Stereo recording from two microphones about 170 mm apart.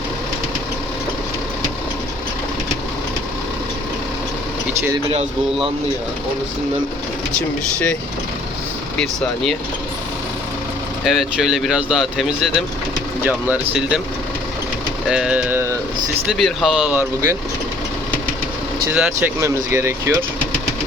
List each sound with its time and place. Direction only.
9.0 s speech: centre (ahead or behind)
11.0 s speech: centre (ahead or behind)
15.1 s speech: 5° right (ahead or behind)
16.2 s speech: centre (ahead or behind)
18.9 s speech: 5° right (ahead or behind)